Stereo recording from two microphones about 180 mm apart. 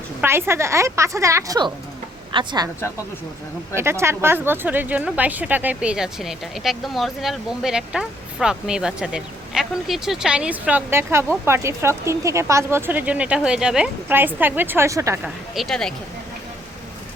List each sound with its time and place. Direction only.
0.2 s a woman's voice: 15° right (ahead or behind)
3.8 s speech: 15° right (ahead or behind)
15.5 s speech: centre (ahead or behind)